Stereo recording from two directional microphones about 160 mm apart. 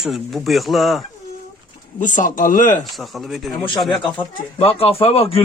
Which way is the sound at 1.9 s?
50° left (ahead or behind).